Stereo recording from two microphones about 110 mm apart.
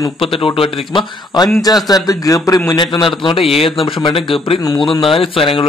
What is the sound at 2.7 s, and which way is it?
A man's voice, 45° left (ahead or behind).